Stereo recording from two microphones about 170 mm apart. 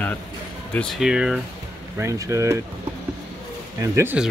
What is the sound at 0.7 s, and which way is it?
Speech, 5° left (ahead or behind).